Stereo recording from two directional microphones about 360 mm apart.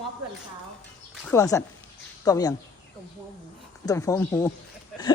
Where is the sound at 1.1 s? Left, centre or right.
Centre.